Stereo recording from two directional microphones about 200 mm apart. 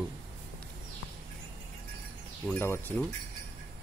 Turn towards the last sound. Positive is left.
turn(degrees=10)  # may be behind; listen again after turning